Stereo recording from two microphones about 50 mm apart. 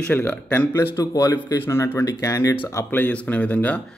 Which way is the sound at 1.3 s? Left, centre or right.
Left.